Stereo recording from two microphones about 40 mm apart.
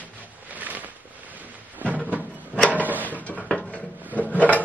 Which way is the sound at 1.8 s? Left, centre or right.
Right.